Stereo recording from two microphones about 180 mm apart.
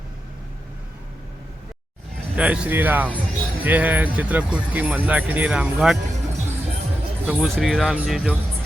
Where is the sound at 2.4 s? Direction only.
10° right (ahead or behind).